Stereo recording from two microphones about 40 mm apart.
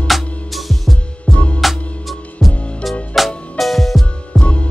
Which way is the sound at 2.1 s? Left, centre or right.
Centre.